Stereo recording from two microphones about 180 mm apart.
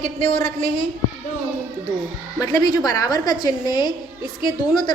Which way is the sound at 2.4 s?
20° left (ahead or behind).